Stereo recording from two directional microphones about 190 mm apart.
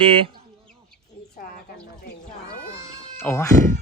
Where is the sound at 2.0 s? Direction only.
55° left (ahead or behind).